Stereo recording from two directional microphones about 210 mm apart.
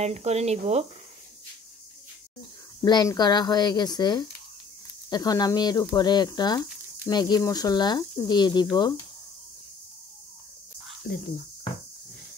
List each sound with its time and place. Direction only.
0.0 s speech: 30° right (ahead or behind)
2.8 s speech: 20° left (ahead or behind)
11.1 s speech: 45° left (ahead or behind)